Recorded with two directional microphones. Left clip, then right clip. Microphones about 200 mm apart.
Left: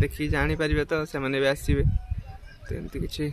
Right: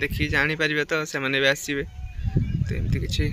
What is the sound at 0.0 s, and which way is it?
Speech, 5° left (ahead or behind).